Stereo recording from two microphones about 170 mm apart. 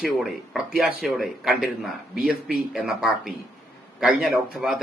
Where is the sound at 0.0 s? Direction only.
Centre (ahead or behind).